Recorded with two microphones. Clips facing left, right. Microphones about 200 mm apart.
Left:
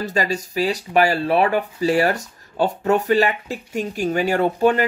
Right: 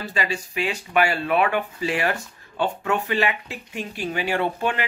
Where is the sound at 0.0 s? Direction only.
40° left (ahead or behind).